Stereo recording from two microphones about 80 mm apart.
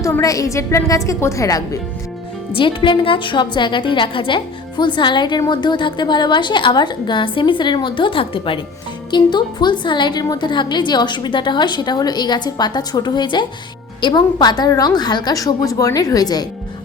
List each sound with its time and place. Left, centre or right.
0.2 s a woman's voice: left
2.6 s a woman's voice: left
9.0 s a woman's voice: left
15.4 s a woman's voice: left